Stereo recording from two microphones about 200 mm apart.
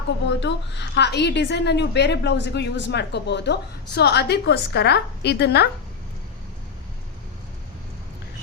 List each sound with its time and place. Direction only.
0.3 s a woman's voice: 60° left (ahead or behind)